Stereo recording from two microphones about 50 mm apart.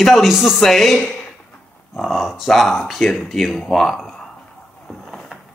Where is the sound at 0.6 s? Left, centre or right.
Centre.